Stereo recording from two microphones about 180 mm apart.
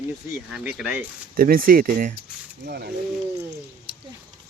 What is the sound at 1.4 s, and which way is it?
Speech, 50° right (ahead or behind).